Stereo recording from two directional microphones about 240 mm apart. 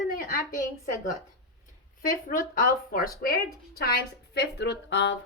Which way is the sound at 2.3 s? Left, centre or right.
Left.